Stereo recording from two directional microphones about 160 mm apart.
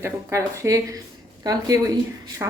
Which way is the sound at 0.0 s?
20° right (ahead or behind).